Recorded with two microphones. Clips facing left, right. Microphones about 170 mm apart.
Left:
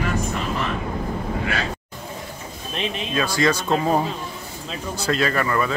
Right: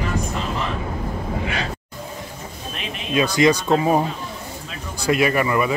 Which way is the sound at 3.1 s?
15° right (ahead or behind).